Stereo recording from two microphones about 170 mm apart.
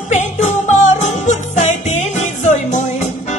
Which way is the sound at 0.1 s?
45° left (ahead or behind).